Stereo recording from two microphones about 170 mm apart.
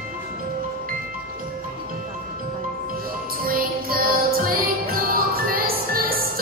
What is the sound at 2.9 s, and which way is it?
Music, 60° right (ahead or behind).